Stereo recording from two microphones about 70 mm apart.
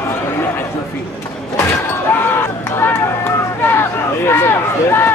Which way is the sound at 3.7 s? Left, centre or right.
Left.